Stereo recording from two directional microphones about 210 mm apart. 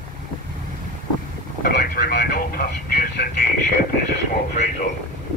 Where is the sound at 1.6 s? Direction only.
45° left (ahead or behind).